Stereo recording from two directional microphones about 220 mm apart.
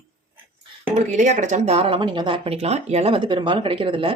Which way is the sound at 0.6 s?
30° right (ahead or behind).